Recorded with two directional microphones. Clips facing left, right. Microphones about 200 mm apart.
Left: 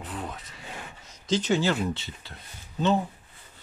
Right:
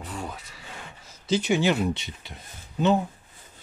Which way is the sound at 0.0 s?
Centre (ahead or behind).